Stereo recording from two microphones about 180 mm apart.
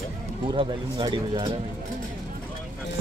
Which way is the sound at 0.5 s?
25° right (ahead or behind).